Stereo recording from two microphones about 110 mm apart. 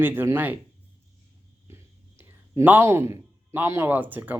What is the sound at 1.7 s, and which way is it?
Whispering, 25° right (ahead or behind).